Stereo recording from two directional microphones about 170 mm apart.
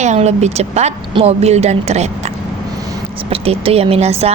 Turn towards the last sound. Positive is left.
turn(degrees=-40)  # may be behind; listen again after turning